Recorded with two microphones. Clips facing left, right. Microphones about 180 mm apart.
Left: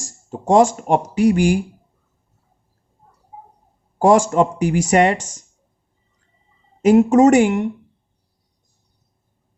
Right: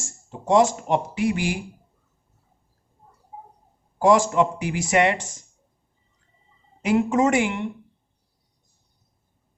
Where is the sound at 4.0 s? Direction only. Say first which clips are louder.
Left 4 dB; 45° left (ahead or behind).